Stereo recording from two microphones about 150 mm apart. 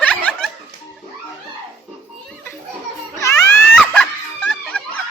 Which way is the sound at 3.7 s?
5° left (ahead or behind).